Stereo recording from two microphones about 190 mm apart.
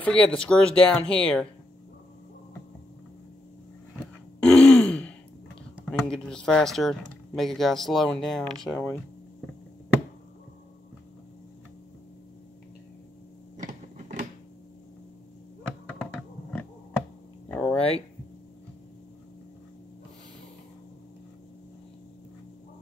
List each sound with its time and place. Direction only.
0.0 s speech: 5° left (ahead or behind)
4.0 s throat clearing: 5° left (ahead or behind)
5.8 s speech: 5° left (ahead or behind)
8.7 s speech: 15° left (ahead or behind)
13.6 s power windows: 40° right (ahead or behind)
15.9 s computer keyboard: 5° left (ahead or behind)
17.5 s a sound: 10° left (ahead or behind)
17.7 s a sound: 30° left (ahead or behind)